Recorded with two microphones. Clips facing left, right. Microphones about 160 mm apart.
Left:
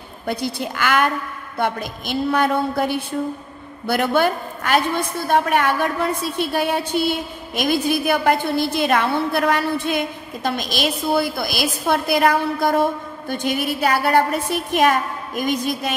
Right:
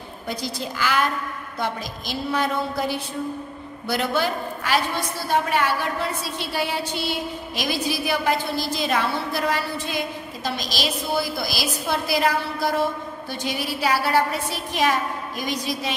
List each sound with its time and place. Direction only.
0.3 s a woman's voice: 60° left (ahead or behind)